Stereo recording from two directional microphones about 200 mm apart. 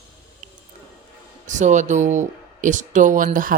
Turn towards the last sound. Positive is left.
turn(degrees=-40)  # may be behind; listen again after turning